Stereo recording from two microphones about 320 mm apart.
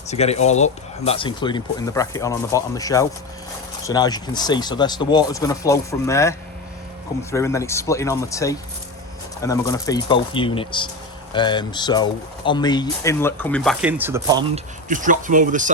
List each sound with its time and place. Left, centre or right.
0.1 s speech: centre
14.5 s speech: right